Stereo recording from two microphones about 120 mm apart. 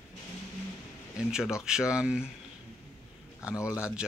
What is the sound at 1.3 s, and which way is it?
Speech, 5° right (ahead or behind).